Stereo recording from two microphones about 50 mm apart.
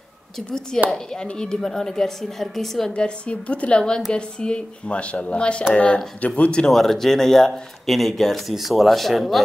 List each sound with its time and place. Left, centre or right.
0.8 s speech: centre
2.9 s speech: left
6.7 s speech: centre